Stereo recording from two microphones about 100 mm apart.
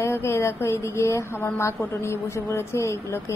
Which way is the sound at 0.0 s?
25° left (ahead or behind).